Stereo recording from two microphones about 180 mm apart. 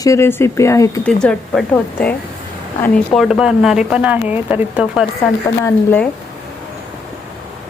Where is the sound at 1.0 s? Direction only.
5° left (ahead or behind).